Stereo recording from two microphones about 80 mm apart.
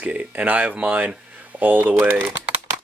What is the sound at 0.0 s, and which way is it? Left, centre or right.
Speech, centre.